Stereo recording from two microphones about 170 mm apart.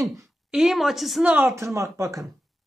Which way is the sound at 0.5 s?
Centre (ahead or behind).